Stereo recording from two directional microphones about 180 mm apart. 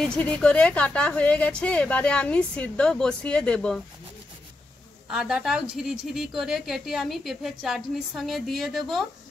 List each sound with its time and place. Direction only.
0.0 s a woman's voice: 5° left (ahead or behind)
5.1 s a woman's voice: centre (ahead or behind)